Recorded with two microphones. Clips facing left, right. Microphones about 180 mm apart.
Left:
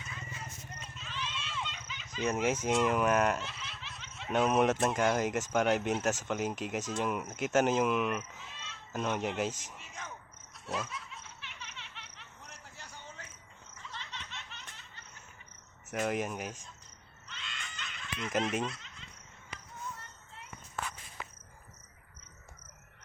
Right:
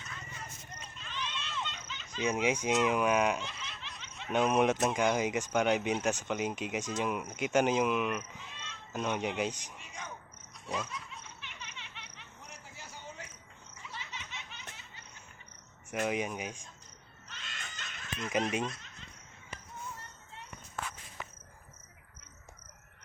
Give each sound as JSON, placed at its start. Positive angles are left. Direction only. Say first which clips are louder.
{"t": 0.9, "sound": "speech", "louder": "right 1 dB", "side_deg": 5}
{"t": 10.7, "sound": "laughter", "louder": "even", "side_deg": 5}
{"t": 13.7, "sound": "baby laughter", "louder": "even", "side_deg": -10}
{"t": 15.9, "sound": "speech", "louder": "even", "side_deg": 0}
{"t": 17.2, "sound": "a sound", "louder": "left 1 dB", "side_deg": -45}
{"t": 18.7, "sound": "baby laughter", "louder": "even", "side_deg": -45}